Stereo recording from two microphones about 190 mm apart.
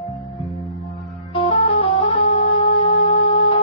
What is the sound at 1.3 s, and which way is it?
Music, 30° left (ahead or behind).